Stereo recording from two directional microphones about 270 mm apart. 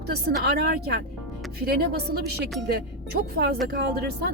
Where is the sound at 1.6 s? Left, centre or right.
Right.